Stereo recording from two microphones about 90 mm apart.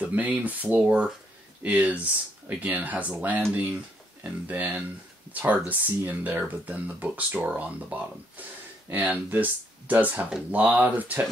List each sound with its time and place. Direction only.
0.0 s speech: 15° right (ahead or behind)